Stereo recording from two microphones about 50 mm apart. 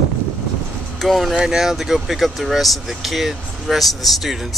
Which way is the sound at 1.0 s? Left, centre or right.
Centre.